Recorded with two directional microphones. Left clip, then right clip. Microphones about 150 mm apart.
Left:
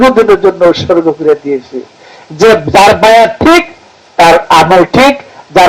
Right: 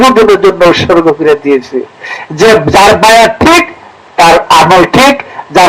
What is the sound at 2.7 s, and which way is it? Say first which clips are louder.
Speech: even; 35° right (ahead or behind).